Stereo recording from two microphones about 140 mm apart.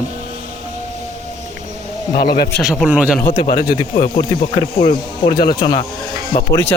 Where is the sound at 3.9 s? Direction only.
55° left (ahead or behind).